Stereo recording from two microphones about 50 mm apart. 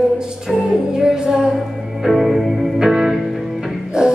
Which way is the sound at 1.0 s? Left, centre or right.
Centre.